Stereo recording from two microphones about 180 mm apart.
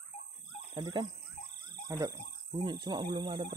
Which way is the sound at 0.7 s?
25° right (ahead or behind).